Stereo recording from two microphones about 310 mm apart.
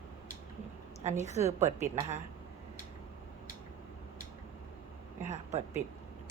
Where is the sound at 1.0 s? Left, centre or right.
Right.